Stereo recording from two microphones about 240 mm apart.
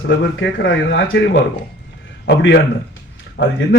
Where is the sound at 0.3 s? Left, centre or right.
Left.